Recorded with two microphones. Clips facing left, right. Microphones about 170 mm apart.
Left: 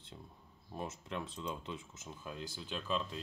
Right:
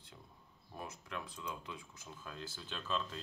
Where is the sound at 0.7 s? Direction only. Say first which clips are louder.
Left 4 dB; 25° left (ahead or behind).